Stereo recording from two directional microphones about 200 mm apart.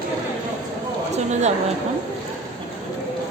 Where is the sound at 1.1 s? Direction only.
35° right (ahead or behind).